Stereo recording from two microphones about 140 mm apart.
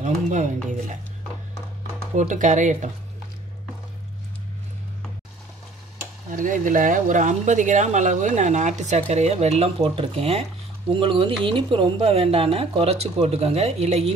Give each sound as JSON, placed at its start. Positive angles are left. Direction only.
{"t": 0.0, "sound": "speech", "side_deg": -60}
{"t": 2.1, "sound": "speech", "side_deg": -60}
{"t": 6.3, "sound": "speech", "side_deg": -70}